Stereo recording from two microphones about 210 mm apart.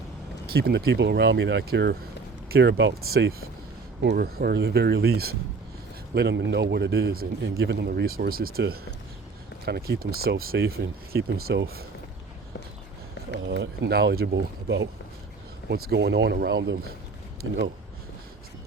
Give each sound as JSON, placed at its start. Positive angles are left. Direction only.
{"t": 0.5, "sound": "speech", "side_deg": -45}
{"t": 7.5, "sound": "speech", "side_deg": -60}
{"t": 13.5, "sound": "speech", "side_deg": -50}